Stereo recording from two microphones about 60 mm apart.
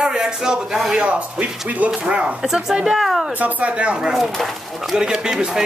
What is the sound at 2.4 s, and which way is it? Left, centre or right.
Speech, centre.